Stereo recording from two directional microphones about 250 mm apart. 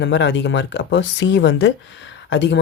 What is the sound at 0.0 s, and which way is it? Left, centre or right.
Speech, left.